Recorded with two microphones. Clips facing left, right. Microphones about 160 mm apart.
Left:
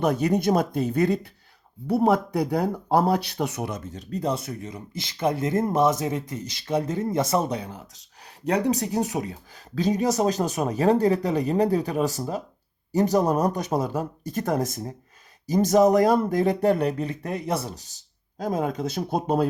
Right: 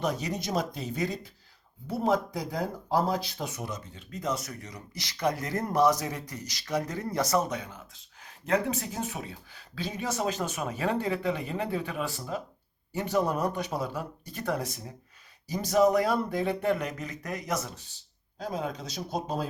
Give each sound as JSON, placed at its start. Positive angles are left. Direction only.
{"t": 0.0, "sound": "speech", "side_deg": 55}
{"t": 3.9, "sound": "speech", "side_deg": 35}